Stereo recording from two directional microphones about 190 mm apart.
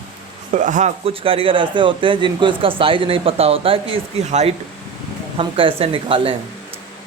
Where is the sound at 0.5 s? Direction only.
40° right (ahead or behind).